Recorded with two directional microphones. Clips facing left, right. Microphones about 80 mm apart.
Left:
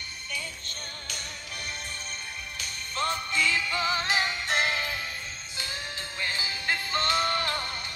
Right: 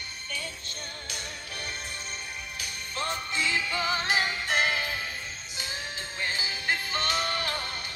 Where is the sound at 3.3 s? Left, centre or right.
Right.